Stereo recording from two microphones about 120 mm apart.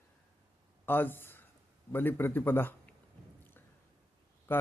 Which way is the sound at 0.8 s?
15° left (ahead or behind).